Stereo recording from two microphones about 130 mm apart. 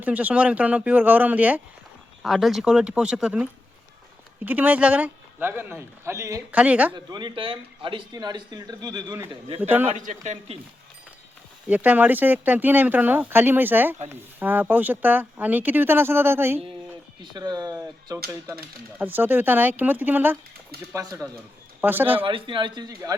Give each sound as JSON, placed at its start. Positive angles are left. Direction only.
{"t": 0.0, "sound": "speech", "side_deg": -10}
{"t": 2.2, "sound": "speech", "side_deg": 0}
{"t": 6.5, "sound": "speech", "side_deg": -10}
{"t": 6.9, "sound": "a man's voice", "side_deg": -35}
{"t": 9.6, "sound": "speech", "side_deg": -15}
{"t": 9.9, "sound": "a man's voice", "side_deg": -60}
{"t": 11.7, "sound": "speech", "side_deg": -10}
{"t": 17.3, "sound": "a man's voice", "side_deg": -30}
{"t": 18.9, "sound": "speech", "side_deg": -15}
{"t": 22.2, "sound": "a man's voice", "side_deg": -40}